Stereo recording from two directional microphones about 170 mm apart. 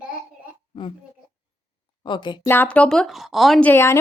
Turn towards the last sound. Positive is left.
turn(degrees=15)  # may be behind; listen again after turning